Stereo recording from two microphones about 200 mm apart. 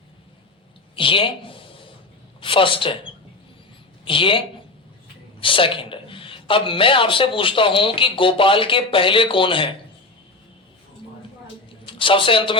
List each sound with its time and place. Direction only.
0.9 s a sound: 25° left (ahead or behind)
2.4 s speech: 25° left (ahead or behind)
11.9 s a man's voice: 25° left (ahead or behind)